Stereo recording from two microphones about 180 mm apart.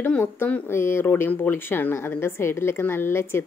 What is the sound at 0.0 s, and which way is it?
A woman's voice, 10° left (ahead or behind).